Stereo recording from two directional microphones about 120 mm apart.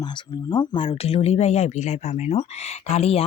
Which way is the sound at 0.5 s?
40° left (ahead or behind).